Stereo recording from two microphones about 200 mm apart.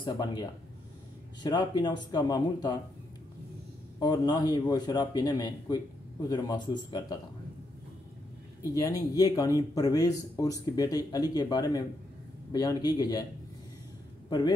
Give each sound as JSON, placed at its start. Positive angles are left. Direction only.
{"t": 0.0, "sound": "a man's voice", "side_deg": 20}
{"t": 4.0, "sound": "a man's voice", "side_deg": 20}
{"t": 9.1, "sound": "a man's voice", "side_deg": 20}